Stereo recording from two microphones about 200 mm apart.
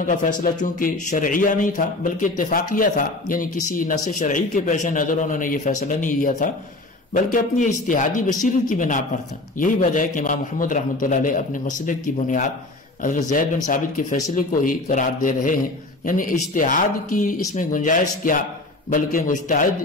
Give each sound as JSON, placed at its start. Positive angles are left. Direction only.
{"t": 0.0, "sound": "speech", "side_deg": 40}
{"t": 14.3, "sound": "speech", "side_deg": 40}